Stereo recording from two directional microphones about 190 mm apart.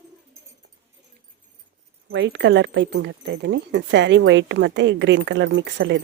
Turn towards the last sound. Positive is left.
turn(degrees=-70)  # may be behind; listen again after turning